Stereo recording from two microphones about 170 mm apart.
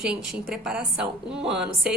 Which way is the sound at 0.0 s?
5° right (ahead or behind).